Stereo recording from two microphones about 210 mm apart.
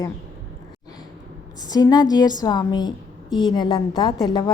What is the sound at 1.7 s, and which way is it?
A woman's voice, 20° left (ahead or behind).